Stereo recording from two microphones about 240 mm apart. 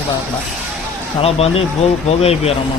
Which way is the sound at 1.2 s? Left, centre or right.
Left.